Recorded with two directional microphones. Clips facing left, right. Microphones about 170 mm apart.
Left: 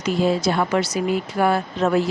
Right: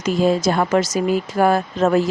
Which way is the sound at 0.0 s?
45° right (ahead or behind).